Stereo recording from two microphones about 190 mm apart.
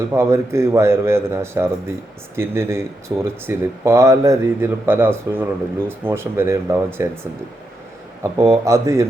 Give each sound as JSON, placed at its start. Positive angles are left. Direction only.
{"t": 0.1, "sound": "speech", "side_deg": -15}
{"t": 8.2, "sound": "speech", "side_deg": -15}